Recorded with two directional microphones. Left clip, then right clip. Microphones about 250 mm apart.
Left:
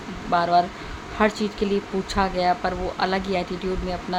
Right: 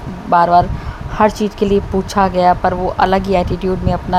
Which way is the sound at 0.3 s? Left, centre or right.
Right.